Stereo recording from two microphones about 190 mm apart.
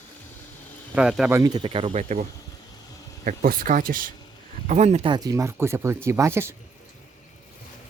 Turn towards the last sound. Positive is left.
turn(degrees=-15)  # may be behind; listen again after turning